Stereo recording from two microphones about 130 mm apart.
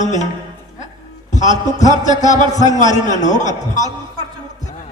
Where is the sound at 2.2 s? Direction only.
65° left (ahead or behind).